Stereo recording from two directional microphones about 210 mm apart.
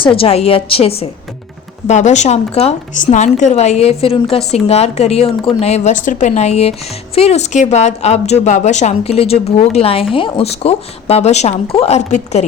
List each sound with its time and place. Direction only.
0.0 s a woman's voice: 25° left (ahead or behind)